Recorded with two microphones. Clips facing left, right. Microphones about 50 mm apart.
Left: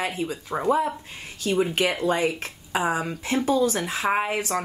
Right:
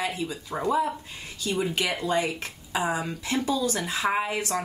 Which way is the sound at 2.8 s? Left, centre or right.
Left.